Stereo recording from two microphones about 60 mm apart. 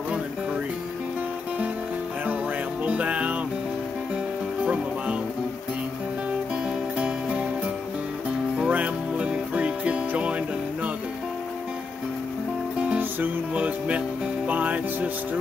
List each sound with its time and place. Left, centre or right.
2.8 s music: right
8.6 s music: right
12.9 s music: right